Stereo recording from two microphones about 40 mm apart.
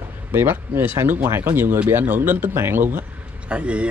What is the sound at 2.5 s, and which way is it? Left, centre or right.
Speech, right.